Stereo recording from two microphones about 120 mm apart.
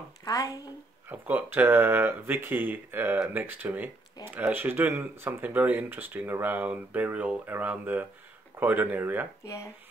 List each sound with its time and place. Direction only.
0.2 s speech: 30° left (ahead or behind)
1.0 s speech: 15° right (ahead or behind)